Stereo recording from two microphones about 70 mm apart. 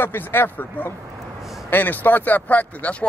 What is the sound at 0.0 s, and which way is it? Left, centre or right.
A man's voice, left.